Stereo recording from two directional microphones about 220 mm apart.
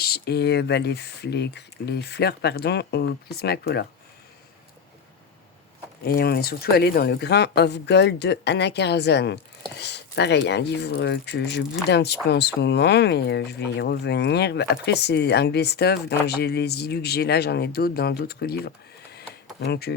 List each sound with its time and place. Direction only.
0.0 s speech: 45° left (ahead or behind)
6.1 s speech: 45° left (ahead or behind)